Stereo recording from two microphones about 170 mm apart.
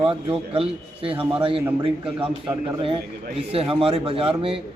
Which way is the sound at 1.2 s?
10° right (ahead or behind).